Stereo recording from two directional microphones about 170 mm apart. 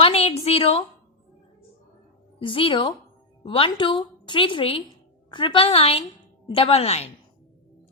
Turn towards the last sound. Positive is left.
turn(degrees=40)  # may be behind; listen again after turning